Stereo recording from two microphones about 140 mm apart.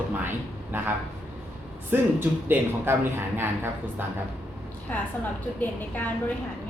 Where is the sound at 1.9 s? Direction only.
15° right (ahead or behind).